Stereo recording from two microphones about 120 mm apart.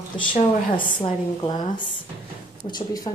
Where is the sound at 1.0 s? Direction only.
40° left (ahead or behind).